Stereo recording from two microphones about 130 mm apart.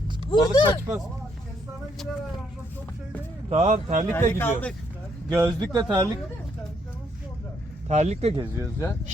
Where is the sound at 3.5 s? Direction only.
65° right (ahead or behind).